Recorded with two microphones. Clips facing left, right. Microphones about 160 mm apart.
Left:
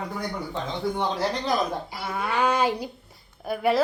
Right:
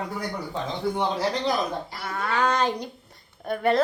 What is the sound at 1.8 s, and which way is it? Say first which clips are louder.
A woman's voice: even; 10° left (ahead or behind).